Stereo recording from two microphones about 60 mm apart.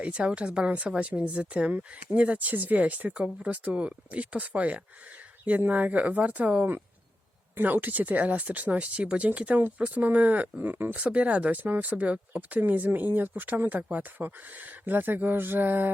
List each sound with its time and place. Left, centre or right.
0.0 s speech: centre; by 15.9 s right